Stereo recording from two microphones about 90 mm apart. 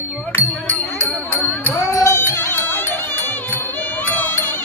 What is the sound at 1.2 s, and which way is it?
Music, 25° left (ahead or behind).